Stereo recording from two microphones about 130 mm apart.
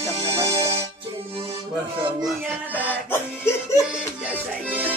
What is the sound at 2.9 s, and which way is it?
Music, 15° left (ahead or behind).